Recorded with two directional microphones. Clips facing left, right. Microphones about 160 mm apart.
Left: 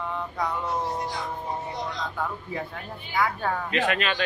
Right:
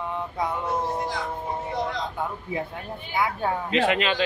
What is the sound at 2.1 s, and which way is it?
Speech, 15° right (ahead or behind).